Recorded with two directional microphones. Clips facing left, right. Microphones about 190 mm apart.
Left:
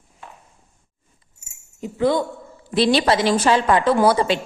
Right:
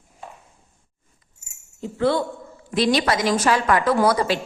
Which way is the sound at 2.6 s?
30° left (ahead or behind).